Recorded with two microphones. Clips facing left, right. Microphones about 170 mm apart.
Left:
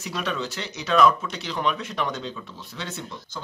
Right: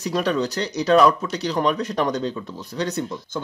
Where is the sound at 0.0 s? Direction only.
40° right (ahead or behind).